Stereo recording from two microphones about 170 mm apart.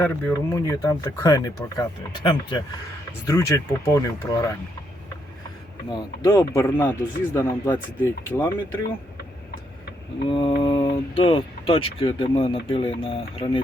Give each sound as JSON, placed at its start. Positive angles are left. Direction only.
{"t": 0.0, "sound": "speech", "side_deg": 15}
{"t": 5.9, "sound": "speech", "side_deg": 20}
{"t": 10.2, "sound": "speech", "side_deg": 30}